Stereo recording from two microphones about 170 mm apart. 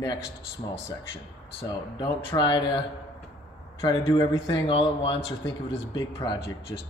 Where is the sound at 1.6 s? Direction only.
30° left (ahead or behind).